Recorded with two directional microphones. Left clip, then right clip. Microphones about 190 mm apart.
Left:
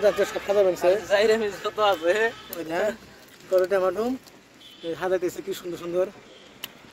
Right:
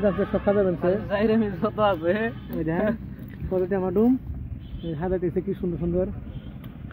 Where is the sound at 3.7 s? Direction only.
15° left (ahead or behind).